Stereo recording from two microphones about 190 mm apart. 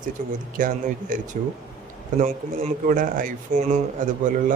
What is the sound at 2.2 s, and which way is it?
A man's voice, 40° right (ahead or behind).